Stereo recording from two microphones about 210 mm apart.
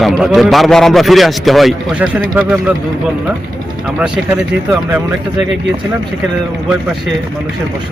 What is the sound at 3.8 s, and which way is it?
Speech, 5° right (ahead or behind).